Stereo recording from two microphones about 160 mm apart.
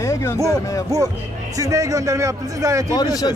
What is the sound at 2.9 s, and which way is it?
Speech, 25° left (ahead or behind).